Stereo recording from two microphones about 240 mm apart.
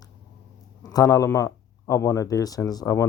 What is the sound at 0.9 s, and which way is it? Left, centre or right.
Speech, centre.